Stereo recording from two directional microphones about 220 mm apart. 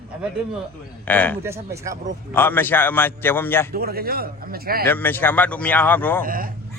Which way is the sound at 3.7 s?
45° right (ahead or behind).